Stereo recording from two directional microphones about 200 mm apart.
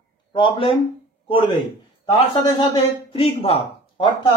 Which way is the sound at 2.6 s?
30° left (ahead or behind).